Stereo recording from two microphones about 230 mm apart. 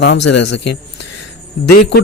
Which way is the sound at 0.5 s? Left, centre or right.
Left.